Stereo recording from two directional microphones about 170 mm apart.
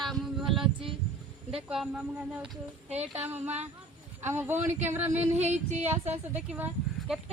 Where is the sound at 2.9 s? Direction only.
40° right (ahead or behind).